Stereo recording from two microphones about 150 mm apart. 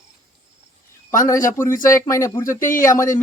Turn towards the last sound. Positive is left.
turn(degrees=20)  # may be behind; listen again after turning